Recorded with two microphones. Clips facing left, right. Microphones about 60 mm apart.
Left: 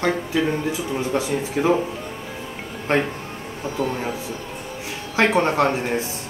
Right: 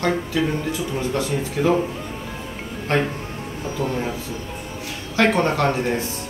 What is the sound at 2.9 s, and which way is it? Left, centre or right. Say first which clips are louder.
Speech: left 1 dB; centre.